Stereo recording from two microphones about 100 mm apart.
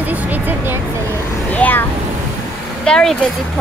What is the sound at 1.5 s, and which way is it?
Speech, 15° left (ahead or behind).